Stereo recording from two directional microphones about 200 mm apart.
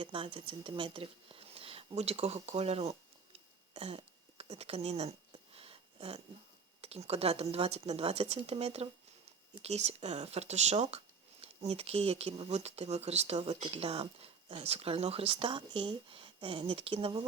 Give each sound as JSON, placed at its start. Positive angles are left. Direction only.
{"t": 0.0, "sound": "speech", "side_deg": -25}
{"t": 3.8, "sound": "a sound", "side_deg": -30}
{"t": 6.8, "sound": "speech", "side_deg": -30}